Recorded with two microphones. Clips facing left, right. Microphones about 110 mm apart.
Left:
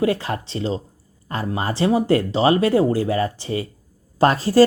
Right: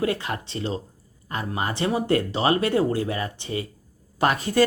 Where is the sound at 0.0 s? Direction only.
30° left (ahead or behind).